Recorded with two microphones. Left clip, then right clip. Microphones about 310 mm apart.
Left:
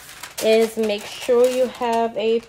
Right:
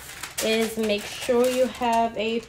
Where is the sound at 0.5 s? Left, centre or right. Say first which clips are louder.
Left 7 dB; left.